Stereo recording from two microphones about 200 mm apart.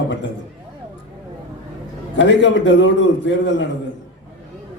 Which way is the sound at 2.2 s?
65° left (ahead or behind).